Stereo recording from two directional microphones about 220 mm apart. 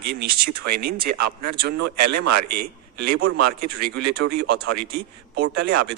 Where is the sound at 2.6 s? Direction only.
45° right (ahead or behind).